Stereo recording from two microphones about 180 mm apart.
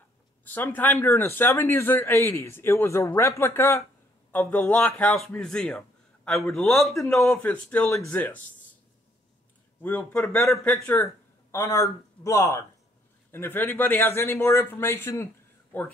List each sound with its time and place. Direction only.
0.5 s a man's voice: 10° left (ahead or behind)
9.8 s a man's voice: 10° left (ahead or behind)